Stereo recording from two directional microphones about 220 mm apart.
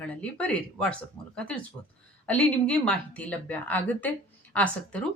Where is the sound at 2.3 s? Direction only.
5° left (ahead or behind).